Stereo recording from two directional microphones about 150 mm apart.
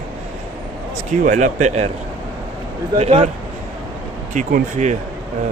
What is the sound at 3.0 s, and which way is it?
Speech, 45° right (ahead or behind).